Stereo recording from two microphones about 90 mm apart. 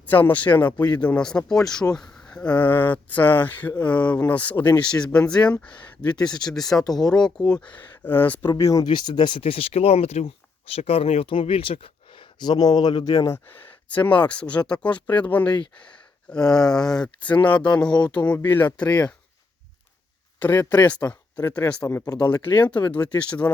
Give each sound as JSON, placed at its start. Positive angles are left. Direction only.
{"t": 0.0, "sound": "speech", "side_deg": 20}
{"t": 6.2, "sound": "speech", "side_deg": 50}
{"t": 6.5, "sound": "speech", "side_deg": 5}
{"t": 8.8, "sound": "speech", "side_deg": 55}
{"t": 12.4, "sound": "speech", "side_deg": 50}
{"t": 13.1, "sound": "speech", "side_deg": 35}
{"t": 13.5, "sound": "speech", "side_deg": 15}
{"t": 15.4, "sound": "speech", "side_deg": 55}
{"t": 16.3, "sound": "speech", "side_deg": 5}
{"t": 20.4, "sound": "speech", "side_deg": 20}